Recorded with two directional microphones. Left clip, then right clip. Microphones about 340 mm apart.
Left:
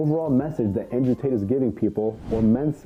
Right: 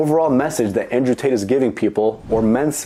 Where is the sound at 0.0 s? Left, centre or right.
Centre.